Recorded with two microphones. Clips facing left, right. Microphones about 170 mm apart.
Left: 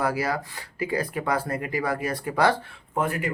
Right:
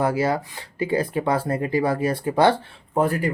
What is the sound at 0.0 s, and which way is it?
Speech, 25° right (ahead or behind).